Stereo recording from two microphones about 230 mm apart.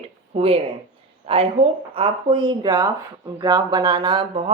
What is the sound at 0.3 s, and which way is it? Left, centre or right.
A woman's voice, right.